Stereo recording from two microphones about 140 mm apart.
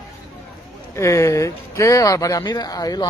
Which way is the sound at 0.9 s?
20° left (ahead or behind).